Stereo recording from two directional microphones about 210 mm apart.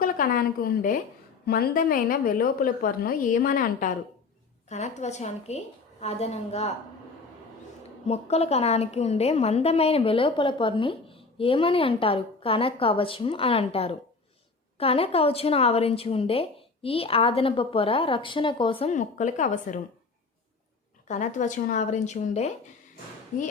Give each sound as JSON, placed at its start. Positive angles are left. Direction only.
{"t": 0.0, "sound": "a woman's voice", "side_deg": 40}
{"t": 8.0, "sound": "a woman's voice", "side_deg": 30}
{"t": 21.1, "sound": "a woman's voice", "side_deg": 35}